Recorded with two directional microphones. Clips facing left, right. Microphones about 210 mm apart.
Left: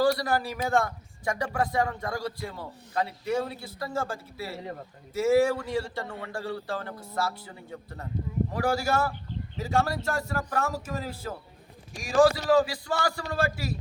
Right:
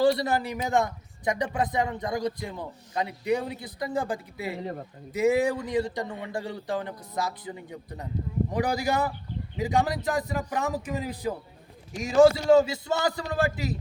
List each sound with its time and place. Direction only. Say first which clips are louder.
0.0 s a man's voice: right 2 dB; 25° right (ahead or behind)